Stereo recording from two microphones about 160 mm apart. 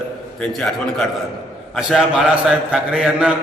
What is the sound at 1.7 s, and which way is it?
A man's voice, centre (ahead or behind).